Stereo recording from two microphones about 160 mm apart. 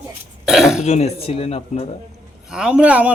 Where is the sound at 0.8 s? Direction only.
45° left (ahead or behind).